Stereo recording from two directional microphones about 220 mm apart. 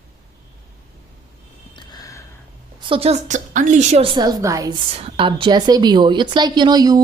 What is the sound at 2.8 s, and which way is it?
A woman's voice, 25° right (ahead or behind).